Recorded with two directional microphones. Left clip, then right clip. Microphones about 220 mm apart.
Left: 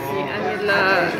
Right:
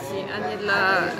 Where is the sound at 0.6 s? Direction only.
5° right (ahead or behind).